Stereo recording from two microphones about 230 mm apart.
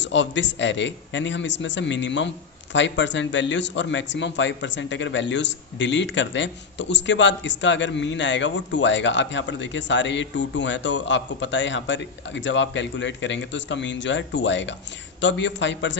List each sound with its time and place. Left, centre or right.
0.0 s a man's voice: left